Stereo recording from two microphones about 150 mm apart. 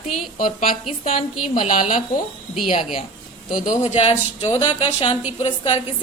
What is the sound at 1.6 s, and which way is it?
Speech, 45° left (ahead or behind).